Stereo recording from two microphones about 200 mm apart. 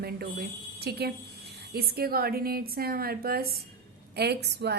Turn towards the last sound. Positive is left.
turn(degrees=-55)  # may be behind; listen again after turning